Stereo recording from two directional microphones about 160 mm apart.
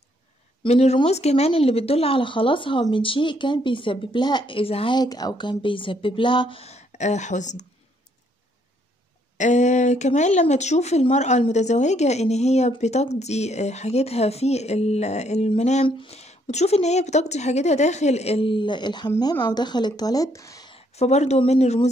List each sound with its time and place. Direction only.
0.6 s speech: 40° left (ahead or behind)
9.4 s a woman's voice: 50° left (ahead or behind); by 20.7 s 20° left (ahead or behind)
20.7 s speech: 40° left (ahead or behind)